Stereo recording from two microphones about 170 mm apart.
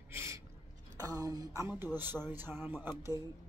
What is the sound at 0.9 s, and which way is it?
Speech, 20° right (ahead or behind).